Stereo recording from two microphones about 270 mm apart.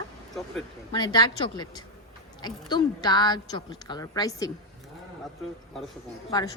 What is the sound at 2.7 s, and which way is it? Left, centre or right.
A woman's voice, centre.